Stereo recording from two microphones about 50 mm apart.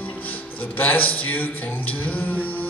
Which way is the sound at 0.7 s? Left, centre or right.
Left.